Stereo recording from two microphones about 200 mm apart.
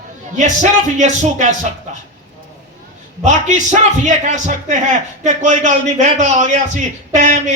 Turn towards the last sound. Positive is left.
turn(degrees=-35)  # may be behind; listen again after turning